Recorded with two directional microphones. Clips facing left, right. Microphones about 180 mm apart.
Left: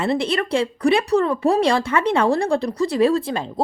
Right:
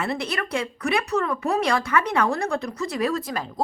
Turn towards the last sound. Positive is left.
turn(degrees=30)  # may be behind; listen again after turning